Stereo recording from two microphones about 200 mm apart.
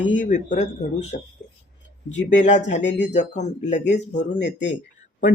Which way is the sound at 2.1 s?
35° left (ahead or behind).